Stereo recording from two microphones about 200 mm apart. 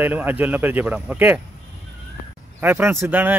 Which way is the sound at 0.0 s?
10° right (ahead or behind).